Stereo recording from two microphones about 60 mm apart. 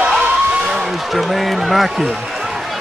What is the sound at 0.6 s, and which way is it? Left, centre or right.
Vehicle, centre.